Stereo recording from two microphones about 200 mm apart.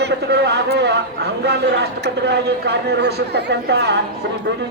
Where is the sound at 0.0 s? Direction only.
55° right (ahead or behind).